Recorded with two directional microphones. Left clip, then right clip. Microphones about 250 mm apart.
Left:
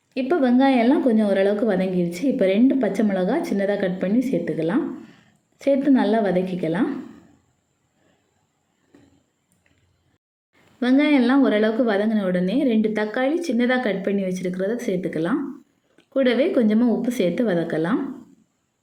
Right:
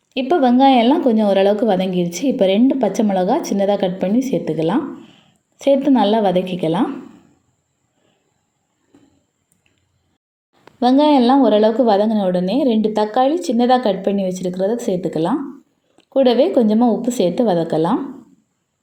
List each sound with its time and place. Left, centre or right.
0.1 s a woman's voice: centre
10.8 s a woman's voice: centre